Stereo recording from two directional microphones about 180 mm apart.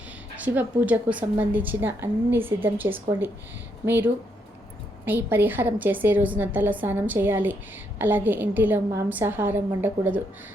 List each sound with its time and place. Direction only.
0.3 s a woman's voice: 10° right (ahead or behind)